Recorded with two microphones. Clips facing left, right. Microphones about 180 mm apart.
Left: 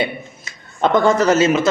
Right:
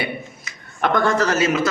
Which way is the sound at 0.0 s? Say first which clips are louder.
Left 4 dB; 25° left (ahead or behind).